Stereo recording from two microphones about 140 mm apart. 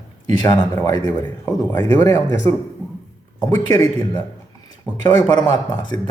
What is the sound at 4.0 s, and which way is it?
Speech, 30° left (ahead or behind).